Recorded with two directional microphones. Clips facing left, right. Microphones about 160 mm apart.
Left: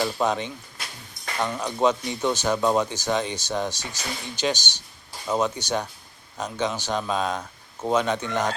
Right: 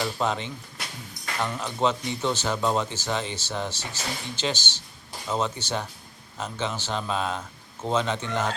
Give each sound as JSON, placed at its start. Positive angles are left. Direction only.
{"t": 0.0, "sound": "speech", "side_deg": 15}